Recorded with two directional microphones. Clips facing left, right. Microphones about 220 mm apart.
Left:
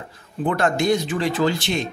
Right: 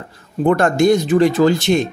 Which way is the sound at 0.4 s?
45° right (ahead or behind).